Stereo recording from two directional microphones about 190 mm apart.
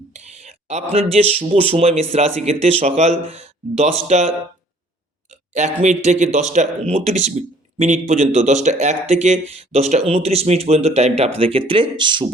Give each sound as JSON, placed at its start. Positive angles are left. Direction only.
{"t": 0.1, "sound": "speech", "side_deg": -35}